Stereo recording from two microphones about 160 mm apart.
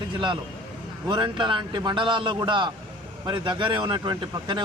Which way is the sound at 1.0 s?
30° right (ahead or behind).